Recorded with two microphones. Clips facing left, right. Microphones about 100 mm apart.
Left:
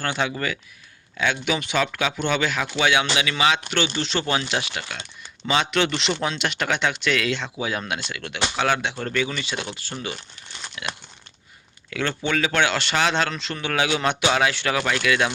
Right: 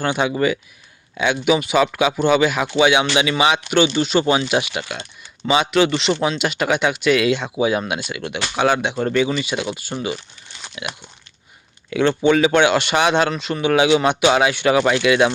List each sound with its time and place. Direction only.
0.0 s speech: 15° right (ahead or behind)